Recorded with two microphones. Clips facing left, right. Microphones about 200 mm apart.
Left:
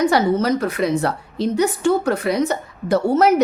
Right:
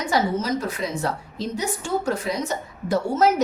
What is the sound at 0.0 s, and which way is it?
A woman's voice, 65° left (ahead or behind).